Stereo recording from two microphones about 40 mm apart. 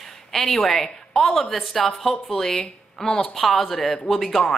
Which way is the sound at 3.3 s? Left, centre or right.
Centre.